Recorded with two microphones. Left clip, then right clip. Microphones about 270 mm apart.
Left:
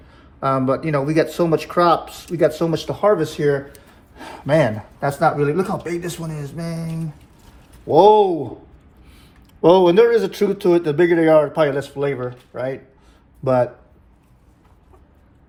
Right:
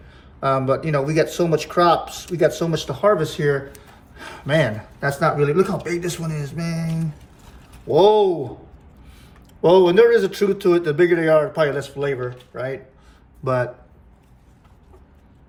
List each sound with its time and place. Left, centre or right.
0.1 s speech: centre
9.6 s speech: centre